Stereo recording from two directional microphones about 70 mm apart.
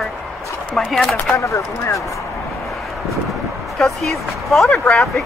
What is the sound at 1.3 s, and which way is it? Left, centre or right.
Speech, left.